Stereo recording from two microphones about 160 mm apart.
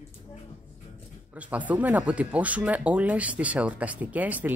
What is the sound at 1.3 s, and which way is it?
Speech, 10° right (ahead or behind).